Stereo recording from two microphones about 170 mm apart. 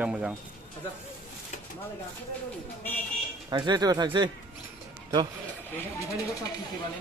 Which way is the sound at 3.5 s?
25° right (ahead or behind).